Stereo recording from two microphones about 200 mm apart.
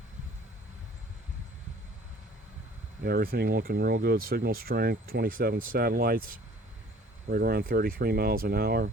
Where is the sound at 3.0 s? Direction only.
50° right (ahead or behind).